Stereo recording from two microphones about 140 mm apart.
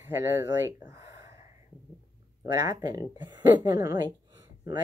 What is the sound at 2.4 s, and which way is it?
Speech, 20° right (ahead or behind).